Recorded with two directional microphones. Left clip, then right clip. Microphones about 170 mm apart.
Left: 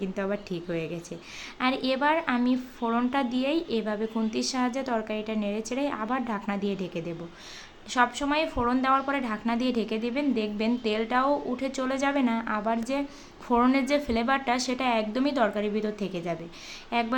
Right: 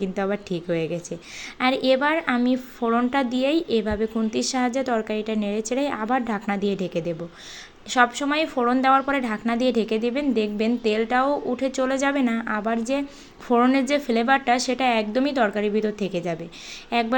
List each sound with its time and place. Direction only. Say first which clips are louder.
0.0 s a woman's voice: right 5 dB; 20° right (ahead or behind)